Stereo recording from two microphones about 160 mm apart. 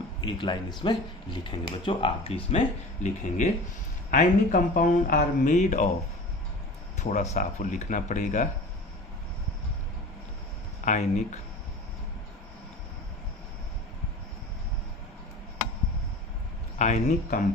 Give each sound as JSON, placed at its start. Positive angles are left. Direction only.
{"t": 0.2, "sound": "speech", "side_deg": 30}
{"t": 4.1, "sound": "speech", "side_deg": 50}
{"t": 7.0, "sound": "speech", "side_deg": 45}
{"t": 10.9, "sound": "speech", "side_deg": 45}
{"t": 16.7, "sound": "speech", "side_deg": 50}